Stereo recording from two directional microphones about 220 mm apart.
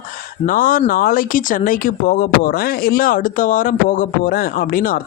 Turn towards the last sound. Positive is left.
turn(degrees=40)  # may be behind; listen again after turning